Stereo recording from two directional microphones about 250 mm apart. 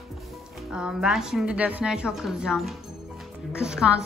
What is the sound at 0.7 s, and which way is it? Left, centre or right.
A woman's voice, centre.